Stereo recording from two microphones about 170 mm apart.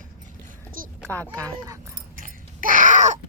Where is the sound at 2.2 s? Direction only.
50° right (ahead or behind).